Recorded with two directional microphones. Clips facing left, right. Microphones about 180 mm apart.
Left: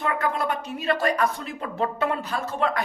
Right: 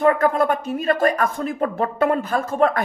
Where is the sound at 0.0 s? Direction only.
45° right (ahead or behind).